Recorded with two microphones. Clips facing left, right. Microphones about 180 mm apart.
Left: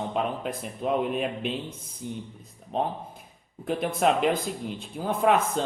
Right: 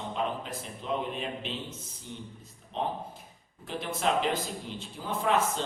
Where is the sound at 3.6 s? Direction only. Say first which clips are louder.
Left 7 dB; 55° left (ahead or behind).